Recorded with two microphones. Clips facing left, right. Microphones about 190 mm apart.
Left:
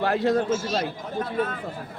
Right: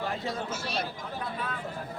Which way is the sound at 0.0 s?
70° left (ahead or behind).